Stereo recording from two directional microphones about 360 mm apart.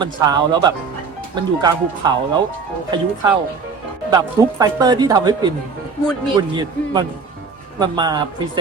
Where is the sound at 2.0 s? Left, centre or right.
Centre.